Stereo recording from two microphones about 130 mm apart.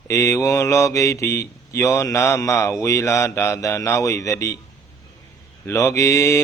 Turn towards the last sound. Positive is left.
turn(degrees=20)  # may be behind; listen again after turning